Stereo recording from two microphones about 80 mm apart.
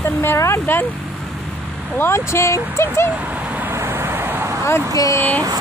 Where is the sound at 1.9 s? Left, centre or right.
Left.